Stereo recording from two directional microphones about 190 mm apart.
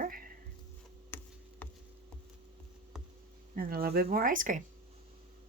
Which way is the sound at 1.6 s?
10° left (ahead or behind).